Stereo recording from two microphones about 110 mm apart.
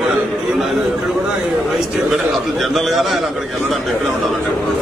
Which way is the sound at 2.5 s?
Centre (ahead or behind).